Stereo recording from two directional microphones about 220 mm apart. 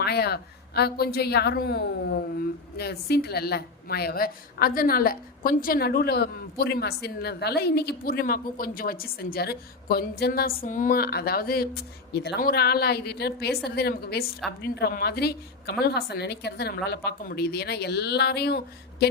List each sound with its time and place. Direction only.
0.0 s a woman's voice: 45° left (ahead or behind)